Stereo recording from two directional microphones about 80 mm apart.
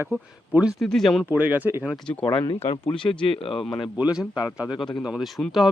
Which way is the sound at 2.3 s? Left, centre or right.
Left.